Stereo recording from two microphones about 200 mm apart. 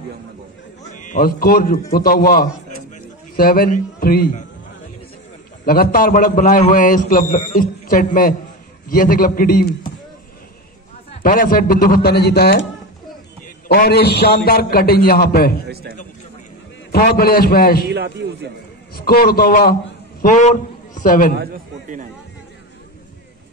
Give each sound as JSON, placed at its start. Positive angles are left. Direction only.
{"t": 0.9, "sound": "a man's voice", "side_deg": 40}
{"t": 5.7, "sound": "a man's voice", "side_deg": 50}
{"t": 11.1, "sound": "a man's voice", "side_deg": 40}
{"t": 13.7, "sound": "a man's voice", "side_deg": 55}
{"t": 16.9, "sound": "a man's voice", "side_deg": 50}
{"t": 17.8, "sound": "a man's voice", "side_deg": -55}
{"t": 18.9, "sound": "a man's voice", "side_deg": 50}
{"t": 21.4, "sound": "a man's voice", "side_deg": -45}